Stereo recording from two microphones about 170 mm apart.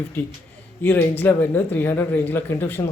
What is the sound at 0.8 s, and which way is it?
Speech, 10° left (ahead or behind).